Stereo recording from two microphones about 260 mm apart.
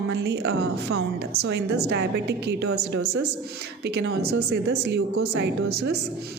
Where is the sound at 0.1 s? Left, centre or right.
Right.